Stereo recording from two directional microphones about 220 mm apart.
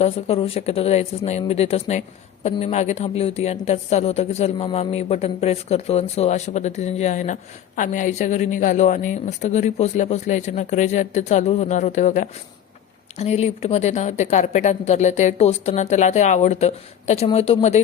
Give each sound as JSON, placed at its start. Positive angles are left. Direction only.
{"t": 0.0, "sound": "a woman's voice", "side_deg": 25}